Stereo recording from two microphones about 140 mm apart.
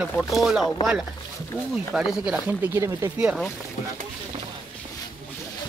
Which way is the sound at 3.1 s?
10° right (ahead or behind).